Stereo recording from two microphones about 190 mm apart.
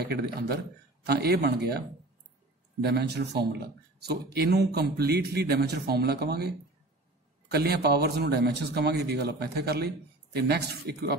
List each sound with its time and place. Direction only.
0.0 s speech: 55° right (ahead or behind)
2.8 s speech: 60° right (ahead or behind)
7.5 s speech: 55° right (ahead or behind)